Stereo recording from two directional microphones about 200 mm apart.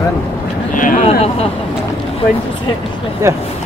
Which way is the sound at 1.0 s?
30° left (ahead or behind).